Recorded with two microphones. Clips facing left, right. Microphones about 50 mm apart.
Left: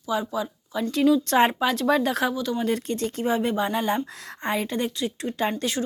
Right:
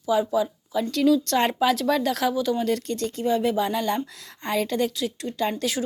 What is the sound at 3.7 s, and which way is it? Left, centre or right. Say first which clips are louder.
Speech: left 1 dB; left.